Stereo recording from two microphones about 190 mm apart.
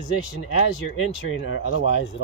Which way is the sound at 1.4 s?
90° left.